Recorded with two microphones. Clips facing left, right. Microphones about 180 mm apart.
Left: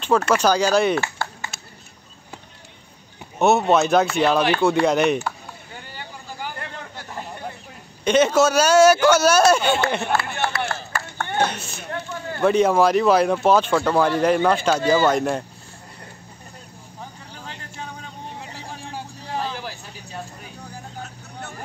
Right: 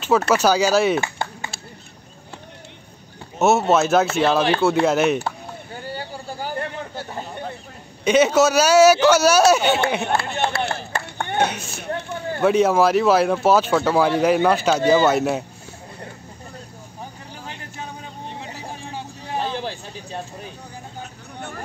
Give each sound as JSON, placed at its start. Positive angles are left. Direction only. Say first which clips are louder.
{"t": 0.3, "sound": "speech", "louder": "right 1 dB", "side_deg": -10}
{"t": 1.0, "sound": "a sound", "louder": "right 1 dB", "side_deg": -20}
{"t": 3.3, "sound": "speech", "louder": "even", "side_deg": -5}
{"t": 5.9, "sound": "a sound", "louder": "right 2 dB", "side_deg": -35}
{"t": 8.0, "sound": "speech", "louder": "right 1 dB", "side_deg": -10}
{"t": 10.1, "sound": "run", "louder": "right 1 dB", "side_deg": -20}
{"t": 10.7, "sound": "chop", "louder": "right 2 dB", "side_deg": -15}
{"t": 12.4, "sound": "speech", "louder": "even", "side_deg": -5}
{"t": 19.3, "sound": "vehicle", "louder": "right 3 dB", "side_deg": -25}